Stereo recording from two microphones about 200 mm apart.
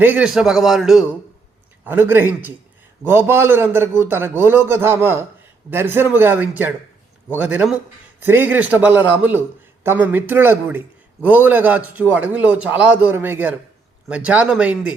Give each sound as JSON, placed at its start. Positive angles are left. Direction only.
{"t": 0.0, "sound": "a man's voice", "side_deg": -5}